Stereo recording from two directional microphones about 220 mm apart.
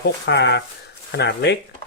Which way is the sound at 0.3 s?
50° left (ahead or behind).